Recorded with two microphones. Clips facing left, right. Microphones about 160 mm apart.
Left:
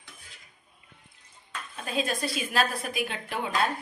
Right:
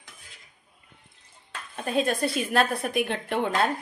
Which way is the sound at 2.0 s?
55° right (ahead or behind).